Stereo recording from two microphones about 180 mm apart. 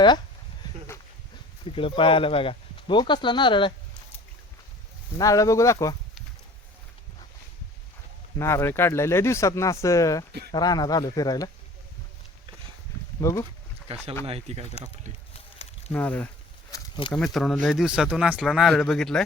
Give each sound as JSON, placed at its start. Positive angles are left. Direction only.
{"t": 1.7, "sound": "speech", "side_deg": 30}
{"t": 5.1, "sound": "speech", "side_deg": 20}
{"t": 8.4, "sound": "speech", "side_deg": 15}
{"t": 13.2, "sound": "speech", "side_deg": 15}
{"t": 13.8, "sound": "speech", "side_deg": -35}
{"t": 15.3, "sound": "a sound", "side_deg": 35}
{"t": 15.9, "sound": "speech", "side_deg": 10}